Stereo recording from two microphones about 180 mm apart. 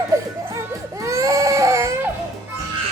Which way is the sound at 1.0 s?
15° right (ahead or behind).